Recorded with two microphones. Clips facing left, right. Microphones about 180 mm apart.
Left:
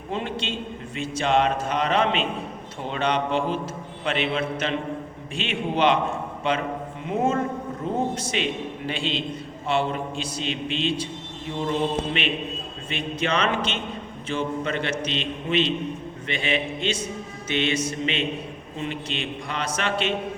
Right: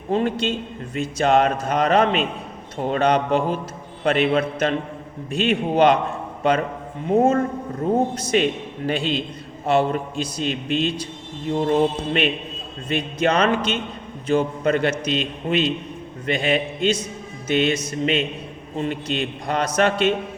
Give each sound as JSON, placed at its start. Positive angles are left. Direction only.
{"t": 0.1, "sound": "a man's voice", "side_deg": -45}
{"t": 12.9, "sound": "a man's voice", "side_deg": -40}